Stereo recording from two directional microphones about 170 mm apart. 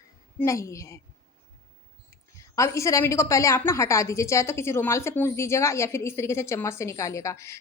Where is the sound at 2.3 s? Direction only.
15° left (ahead or behind).